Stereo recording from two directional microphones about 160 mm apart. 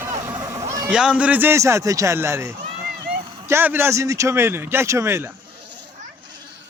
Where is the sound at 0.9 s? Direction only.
5° right (ahead or behind).